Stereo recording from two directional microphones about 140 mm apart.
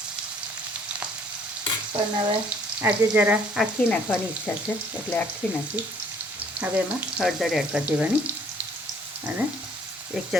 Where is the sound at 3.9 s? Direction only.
10° left (ahead or behind).